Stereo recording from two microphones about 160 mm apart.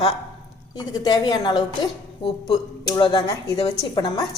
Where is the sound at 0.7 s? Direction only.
25° left (ahead or behind).